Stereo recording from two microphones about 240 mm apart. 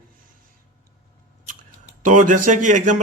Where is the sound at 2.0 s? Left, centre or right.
Right.